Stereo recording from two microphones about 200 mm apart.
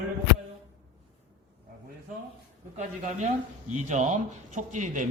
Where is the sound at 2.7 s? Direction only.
40° right (ahead or behind).